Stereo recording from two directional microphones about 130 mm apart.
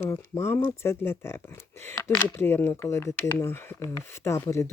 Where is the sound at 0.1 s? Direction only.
20° left (ahead or behind).